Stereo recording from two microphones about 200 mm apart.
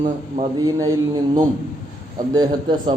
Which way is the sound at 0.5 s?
20° right (ahead or behind).